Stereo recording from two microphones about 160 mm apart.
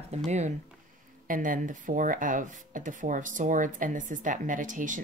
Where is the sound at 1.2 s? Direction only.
55° right (ahead or behind).